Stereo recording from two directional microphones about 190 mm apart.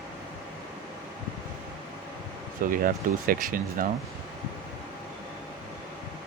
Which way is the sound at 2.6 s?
50° right (ahead or behind).